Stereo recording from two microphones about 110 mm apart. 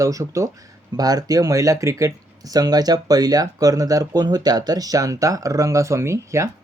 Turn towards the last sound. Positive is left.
turn(degrees=-25)  # may be behind; listen again after turning